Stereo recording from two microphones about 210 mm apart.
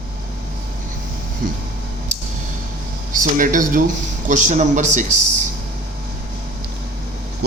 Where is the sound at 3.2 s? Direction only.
40° right (ahead or behind).